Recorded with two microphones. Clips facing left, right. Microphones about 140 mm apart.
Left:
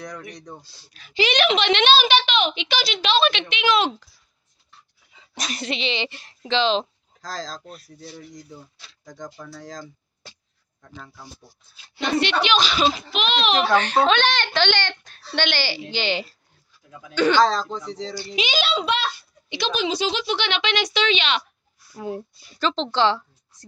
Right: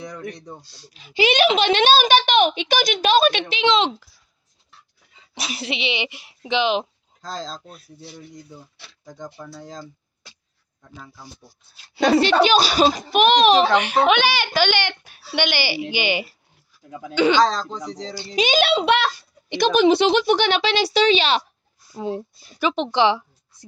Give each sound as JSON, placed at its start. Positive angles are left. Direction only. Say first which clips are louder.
{"t": 0.0, "sound": "speech", "louder": "right 3 dB", "side_deg": -5}
{"t": 0.9, "sound": "a child's voice", "louder": "right 3 dB", "side_deg": -25}
{"t": 3.6, "sound": "speech", "louder": "right 2 dB", "side_deg": -20}
{"t": 5.3, "sound": "a child's voice", "louder": "even", "side_deg": -10}
{"t": 7.2, "sound": "speech", "louder": "right 1 dB", "side_deg": -25}
{"t": 8.1, "sound": "speech", "louder": "even", "side_deg": 0}
{"t": 10.8, "sound": "speech", "louder": "even", "side_deg": -5}
{"t": 12.2, "sound": "a child's voice", "louder": "right 2 dB", "side_deg": -40}
{"t": 13.7, "sound": "a child's voice", "louder": "right 1 dB", "side_deg": -10}
{"t": 17.4, "sound": "speech", "louder": "even", "side_deg": 0}
{"t": 18.3, "sound": "a child's voice", "louder": "right 7 dB", "side_deg": -50}
{"t": 19.5, "sound": "a child's voice", "louder": "right 9 dB", "side_deg": -50}
{"t": 21.9, "sound": "a child's voice", "louder": "right 3 dB", "side_deg": -20}